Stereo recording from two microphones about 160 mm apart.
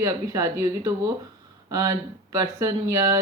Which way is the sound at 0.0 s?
20° right (ahead or behind).